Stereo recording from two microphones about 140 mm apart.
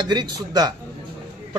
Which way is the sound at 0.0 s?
30° right (ahead or behind).